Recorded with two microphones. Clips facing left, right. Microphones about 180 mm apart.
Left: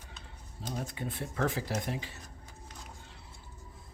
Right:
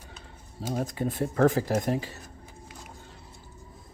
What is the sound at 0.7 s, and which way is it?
Speech, 45° right (ahead or behind).